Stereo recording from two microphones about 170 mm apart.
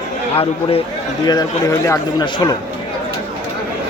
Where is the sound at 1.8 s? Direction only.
20° left (ahead or behind).